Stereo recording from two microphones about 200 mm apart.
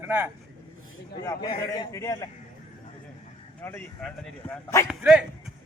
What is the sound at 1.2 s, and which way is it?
A man's voice, 20° left (ahead or behind).